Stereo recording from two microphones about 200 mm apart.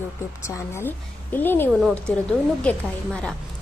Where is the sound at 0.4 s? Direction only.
15° left (ahead or behind).